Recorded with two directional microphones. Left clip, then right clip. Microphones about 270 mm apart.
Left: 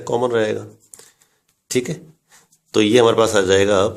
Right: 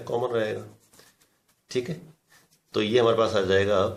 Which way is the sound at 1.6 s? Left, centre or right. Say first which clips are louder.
Left 8 dB; left.